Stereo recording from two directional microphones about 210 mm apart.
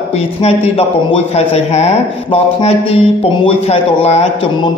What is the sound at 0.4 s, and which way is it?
A man's voice, 30° left (ahead or behind).